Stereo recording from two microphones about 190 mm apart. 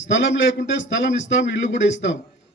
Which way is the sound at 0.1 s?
75° left (ahead or behind).